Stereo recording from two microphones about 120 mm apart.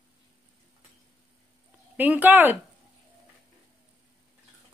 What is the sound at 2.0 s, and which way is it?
Speech, 15° right (ahead or behind).